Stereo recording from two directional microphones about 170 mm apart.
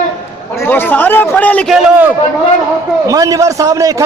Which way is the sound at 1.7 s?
10° right (ahead or behind).